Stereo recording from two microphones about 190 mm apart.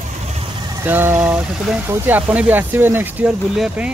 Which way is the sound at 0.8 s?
10° right (ahead or behind).